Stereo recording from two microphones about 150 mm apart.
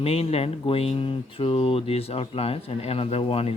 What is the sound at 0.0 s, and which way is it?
Speech, 40° left (ahead or behind).